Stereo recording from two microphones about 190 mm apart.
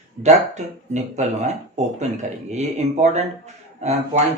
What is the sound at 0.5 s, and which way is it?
Speech, 35° right (ahead or behind).